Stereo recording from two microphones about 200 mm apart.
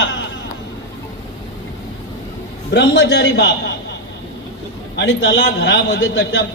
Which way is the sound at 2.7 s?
60° left (ahead or behind).